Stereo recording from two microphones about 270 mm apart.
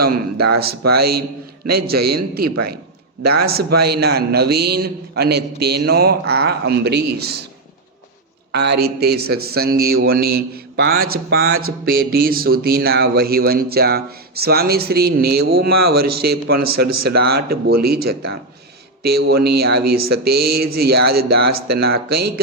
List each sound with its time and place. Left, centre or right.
0.5 s speech: right
3.6 s a man's voice: right
3.8 s speech: right
8.5 s speech: right